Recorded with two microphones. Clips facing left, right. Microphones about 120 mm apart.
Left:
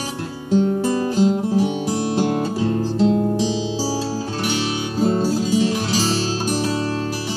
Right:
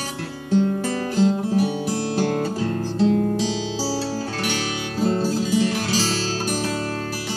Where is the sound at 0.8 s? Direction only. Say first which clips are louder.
Left 3 dB; 20° left (ahead or behind).